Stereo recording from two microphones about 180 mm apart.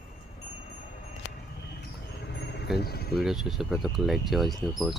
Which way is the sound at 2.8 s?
60° left (ahead or behind).